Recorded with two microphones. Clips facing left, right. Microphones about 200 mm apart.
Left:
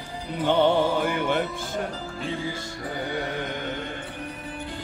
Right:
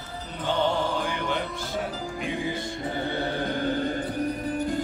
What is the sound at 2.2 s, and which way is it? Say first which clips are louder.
Music: even; 15° right (ahead or behind).